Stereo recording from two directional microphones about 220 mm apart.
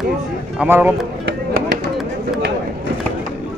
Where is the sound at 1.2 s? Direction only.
50° right (ahead or behind).